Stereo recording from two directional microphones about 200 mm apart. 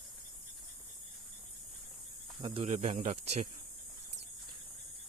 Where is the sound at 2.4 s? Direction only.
30° right (ahead or behind).